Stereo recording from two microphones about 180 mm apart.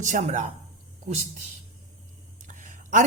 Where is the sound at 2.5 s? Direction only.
45° right (ahead or behind).